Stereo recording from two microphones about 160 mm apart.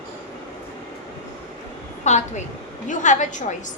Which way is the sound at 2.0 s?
45° left (ahead or behind).